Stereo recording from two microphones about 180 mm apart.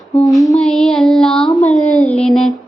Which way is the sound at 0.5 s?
5° left (ahead or behind).